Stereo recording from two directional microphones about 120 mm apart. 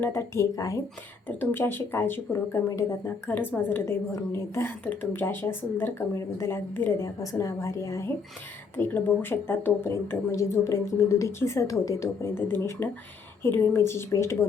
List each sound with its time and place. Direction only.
0.0 s a woman's voice: 20° left (ahead or behind)
1.4 s a woman's voice: 15° left (ahead or behind)